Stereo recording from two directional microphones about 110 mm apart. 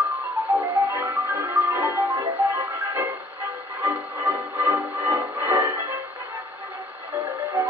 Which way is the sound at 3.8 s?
25° right (ahead or behind).